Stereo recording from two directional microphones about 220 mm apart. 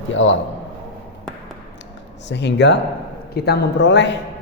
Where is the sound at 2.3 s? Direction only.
50° left (ahead or behind).